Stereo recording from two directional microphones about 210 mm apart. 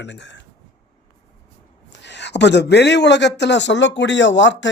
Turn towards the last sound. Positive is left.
turn(degrees=60)  # may be behind; listen again after turning